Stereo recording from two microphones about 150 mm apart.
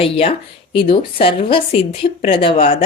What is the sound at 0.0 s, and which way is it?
Speech, 40° left (ahead or behind).